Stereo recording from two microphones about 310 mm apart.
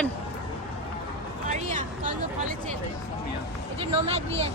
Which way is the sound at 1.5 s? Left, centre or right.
Right.